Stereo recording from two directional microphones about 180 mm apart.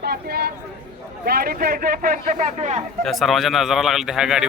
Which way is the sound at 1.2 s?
55° right (ahead or behind).